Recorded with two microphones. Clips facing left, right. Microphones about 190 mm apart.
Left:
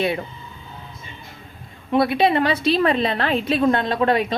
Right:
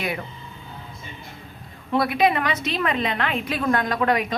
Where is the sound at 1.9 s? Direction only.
25° left (ahead or behind).